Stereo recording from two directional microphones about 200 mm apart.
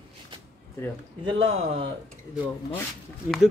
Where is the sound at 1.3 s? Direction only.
25° right (ahead or behind).